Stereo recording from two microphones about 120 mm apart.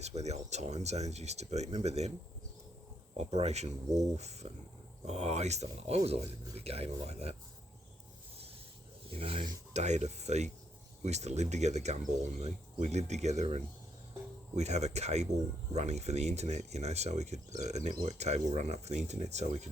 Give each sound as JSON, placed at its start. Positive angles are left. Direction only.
{"t": 0.0, "sound": "speech", "side_deg": -65}
{"t": 3.2, "sound": "speech", "side_deg": -65}
{"t": 9.0, "sound": "speech", "side_deg": -50}
{"t": 9.7, "sound": "speech", "side_deg": -70}